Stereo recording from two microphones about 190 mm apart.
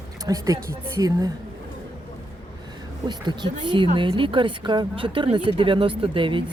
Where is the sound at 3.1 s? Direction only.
25° right (ahead or behind).